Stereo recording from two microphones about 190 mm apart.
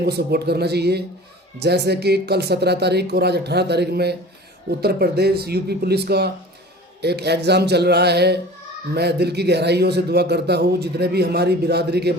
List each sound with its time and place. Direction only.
0.0 s a man's voice: 55° right (ahead or behind)